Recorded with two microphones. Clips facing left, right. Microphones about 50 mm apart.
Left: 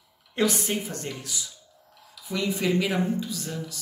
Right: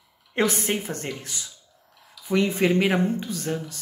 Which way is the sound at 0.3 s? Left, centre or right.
Right.